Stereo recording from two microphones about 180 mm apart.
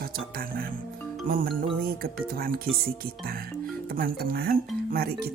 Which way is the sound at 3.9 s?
55° right (ahead or behind).